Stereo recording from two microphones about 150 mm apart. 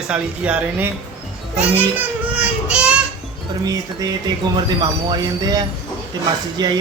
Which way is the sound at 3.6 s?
25° right (ahead or behind).